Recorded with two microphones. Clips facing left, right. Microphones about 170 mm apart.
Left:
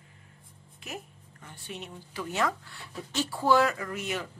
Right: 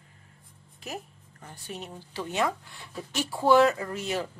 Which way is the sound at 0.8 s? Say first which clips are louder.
Right 3 dB; 35° right (ahead or behind).